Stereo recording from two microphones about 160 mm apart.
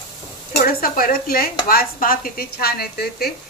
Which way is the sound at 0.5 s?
65° left (ahead or behind).